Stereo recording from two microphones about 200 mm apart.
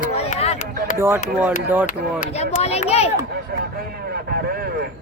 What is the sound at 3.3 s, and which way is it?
Vehicle, 50° right (ahead or behind).